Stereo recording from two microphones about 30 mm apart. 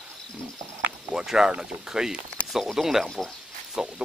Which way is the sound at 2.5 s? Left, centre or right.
Centre.